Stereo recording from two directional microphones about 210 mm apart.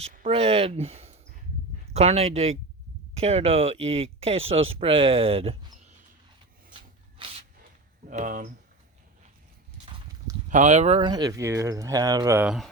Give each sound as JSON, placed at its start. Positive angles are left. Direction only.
{"t": 0.0, "sound": "speech", "side_deg": -30}
{"t": 8.0, "sound": "speech", "side_deg": -35}
{"t": 10.5, "sound": "speech", "side_deg": -35}